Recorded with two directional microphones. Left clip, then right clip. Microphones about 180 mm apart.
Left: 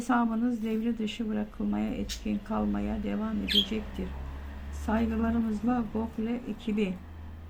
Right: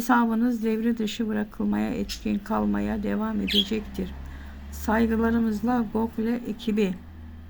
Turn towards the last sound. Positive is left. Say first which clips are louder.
# right 6 dB
turn(degrees=-35)  # may be behind; listen again after turning